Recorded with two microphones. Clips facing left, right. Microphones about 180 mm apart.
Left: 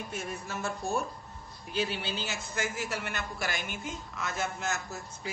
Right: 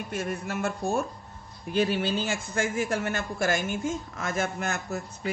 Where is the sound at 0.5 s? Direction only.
60° right (ahead or behind).